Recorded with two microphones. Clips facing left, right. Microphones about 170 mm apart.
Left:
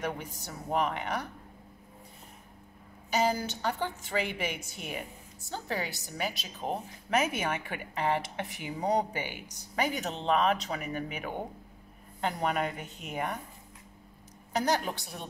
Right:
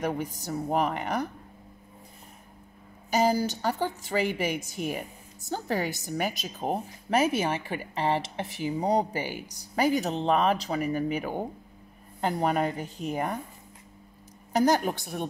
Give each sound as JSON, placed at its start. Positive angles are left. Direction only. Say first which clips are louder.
{"t": 0.0, "sound": "speech", "louder": "right 5 dB", "side_deg": -40}
{"t": 3.1, "sound": "a woman's voice", "louder": "right 4 dB", "side_deg": -40}
{"t": 7.2, "sound": "speech", "louder": "right 5 dB", "side_deg": -30}
{"t": 14.5, "sound": "a woman's voice", "louder": "right 6 dB", "side_deg": -45}